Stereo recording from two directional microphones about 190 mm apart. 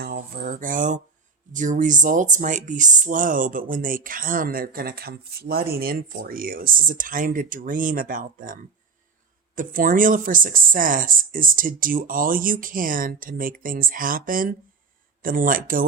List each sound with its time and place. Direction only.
0.0 s a sound: 50° right (ahead or behind)
1.5 s speech: 40° right (ahead or behind)
9.6 s speech: 45° right (ahead or behind)